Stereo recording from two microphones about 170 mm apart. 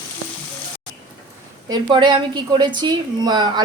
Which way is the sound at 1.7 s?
25° right (ahead or behind).